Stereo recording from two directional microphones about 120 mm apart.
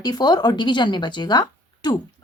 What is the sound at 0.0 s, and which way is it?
Speech, 35° left (ahead or behind).